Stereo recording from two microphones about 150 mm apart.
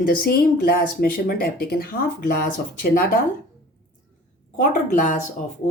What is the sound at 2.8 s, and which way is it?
Speech, 80° left.